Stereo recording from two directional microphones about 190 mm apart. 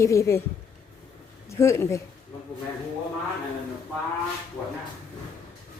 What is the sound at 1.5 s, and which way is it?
Speech, 15° left (ahead or behind).